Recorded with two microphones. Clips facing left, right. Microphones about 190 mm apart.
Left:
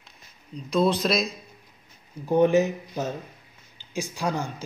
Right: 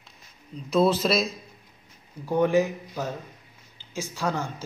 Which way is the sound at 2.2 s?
20° left (ahead or behind).